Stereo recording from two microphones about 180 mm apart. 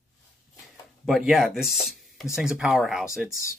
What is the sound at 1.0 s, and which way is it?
Speech, centre (ahead or behind).